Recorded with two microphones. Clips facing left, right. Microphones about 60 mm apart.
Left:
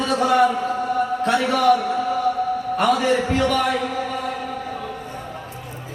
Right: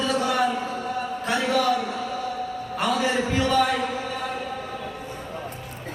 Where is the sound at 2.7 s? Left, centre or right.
Left.